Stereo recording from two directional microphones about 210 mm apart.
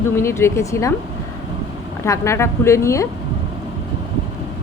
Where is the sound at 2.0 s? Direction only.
15° left (ahead or behind).